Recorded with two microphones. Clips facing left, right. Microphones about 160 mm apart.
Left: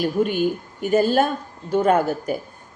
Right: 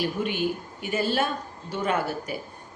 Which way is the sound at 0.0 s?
45° left (ahead or behind).